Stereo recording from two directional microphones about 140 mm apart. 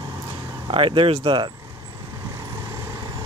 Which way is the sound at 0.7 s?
40° right (ahead or behind).